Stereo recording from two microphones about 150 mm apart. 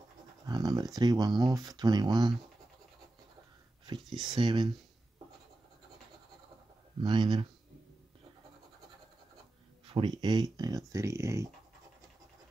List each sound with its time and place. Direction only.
0.5 s a sound: 25° right (ahead or behind)
0.9 s speech: 25° right (ahead or behind)
4.2 s speech: 30° right (ahead or behind)
7.0 s speech: 30° right (ahead or behind)
9.8 s speech: 35° right (ahead or behind)